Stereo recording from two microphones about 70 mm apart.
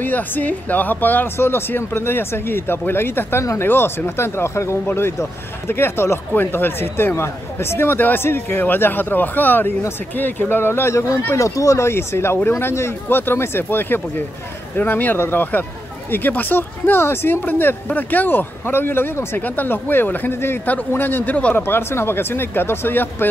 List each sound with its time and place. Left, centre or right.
0.0 s speech: left
21.5 s speech: left